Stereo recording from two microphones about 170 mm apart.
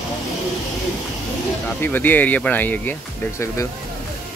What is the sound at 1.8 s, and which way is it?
Speech, 10° left (ahead or behind).